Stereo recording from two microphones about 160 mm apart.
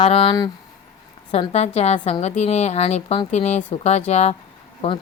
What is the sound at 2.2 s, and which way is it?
Speech, 45° left (ahead or behind).